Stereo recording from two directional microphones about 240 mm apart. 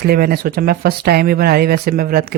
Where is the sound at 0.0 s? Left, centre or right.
Right.